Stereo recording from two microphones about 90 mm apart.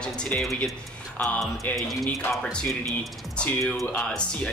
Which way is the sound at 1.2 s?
15° left (ahead or behind).